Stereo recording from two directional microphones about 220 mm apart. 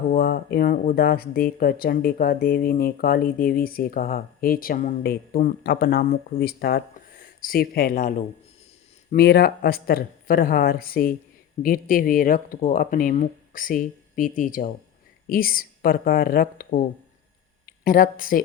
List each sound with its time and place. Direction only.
0.1 s speech: 45° left (ahead or behind)